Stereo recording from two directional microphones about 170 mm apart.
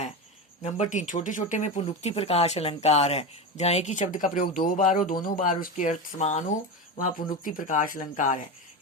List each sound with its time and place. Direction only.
0.6 s speech: 45° left (ahead or behind)